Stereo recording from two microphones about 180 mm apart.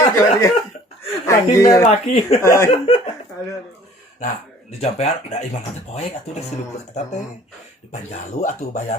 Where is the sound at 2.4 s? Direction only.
15° left (ahead or behind).